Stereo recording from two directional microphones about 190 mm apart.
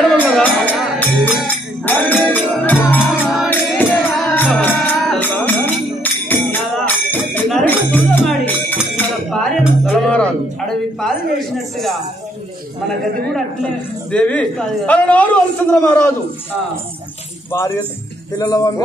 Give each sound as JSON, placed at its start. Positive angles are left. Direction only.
{"t": 0.0, "sound": "speech", "side_deg": 10}
{"t": 1.9, "sound": "music", "side_deg": 10}
{"t": 10.7, "sound": "a sound", "side_deg": 0}
{"t": 14.1, "sound": "a man's voice", "side_deg": 5}
{"t": 17.5, "sound": "a man's voice", "side_deg": 15}